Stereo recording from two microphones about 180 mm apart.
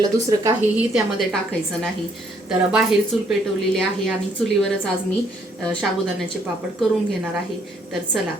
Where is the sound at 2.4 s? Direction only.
5° right (ahead or behind).